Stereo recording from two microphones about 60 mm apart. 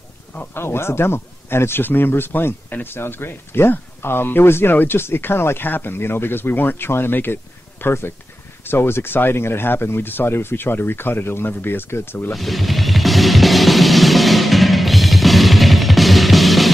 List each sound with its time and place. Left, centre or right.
0.3 s speech: left
0.7 s speech: left
12.4 s music: centre